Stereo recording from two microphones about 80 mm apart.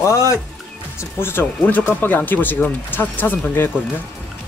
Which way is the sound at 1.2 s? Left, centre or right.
Left.